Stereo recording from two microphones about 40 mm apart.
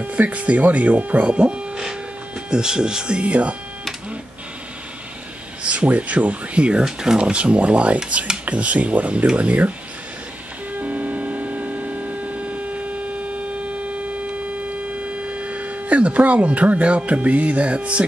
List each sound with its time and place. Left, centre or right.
0.0 s speech: right
2.5 s speech: centre
5.6 s speech: right
6.8 s speech: centre; by 9.7 s right
10.7 s a sound: right
16.4 s speech: right